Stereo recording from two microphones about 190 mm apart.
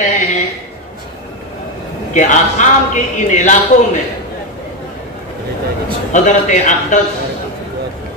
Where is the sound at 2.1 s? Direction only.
40° left (ahead or behind).